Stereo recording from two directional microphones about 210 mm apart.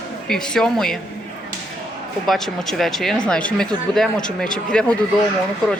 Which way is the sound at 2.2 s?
Centre (ahead or behind).